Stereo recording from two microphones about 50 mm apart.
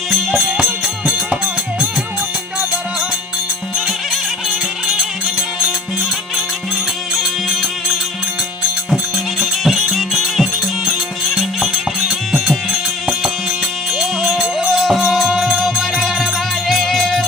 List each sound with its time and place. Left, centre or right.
0.3 s music: centre
7.1 s music: centre
8.9 s music: centre
9.7 s music: centre
11.3 s music: centre
13.9 s music: centre